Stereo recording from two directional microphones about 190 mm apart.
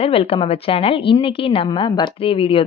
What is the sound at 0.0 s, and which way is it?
A woman's voice, 30° left (ahead or behind).